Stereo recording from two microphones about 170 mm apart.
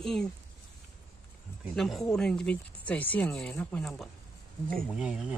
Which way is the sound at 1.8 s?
Centre (ahead or behind).